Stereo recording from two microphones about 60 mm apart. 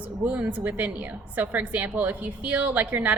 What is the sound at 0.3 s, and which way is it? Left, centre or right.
A woman's voice, right.